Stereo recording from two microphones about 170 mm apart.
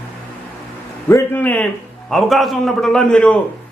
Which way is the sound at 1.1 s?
10° left (ahead or behind).